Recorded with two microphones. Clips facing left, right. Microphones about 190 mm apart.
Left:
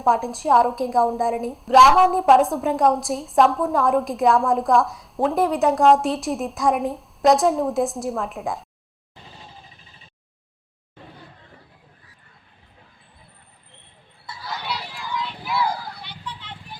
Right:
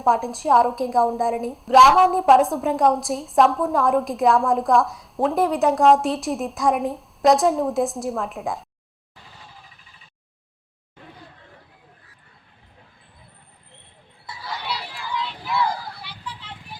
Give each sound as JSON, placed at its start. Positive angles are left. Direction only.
{"t": 0.0, "sound": "a woman's voice", "side_deg": 0}
{"t": 9.1, "sound": "music", "side_deg": 25}
{"t": 14.9, "sound": "vehicle", "side_deg": 0}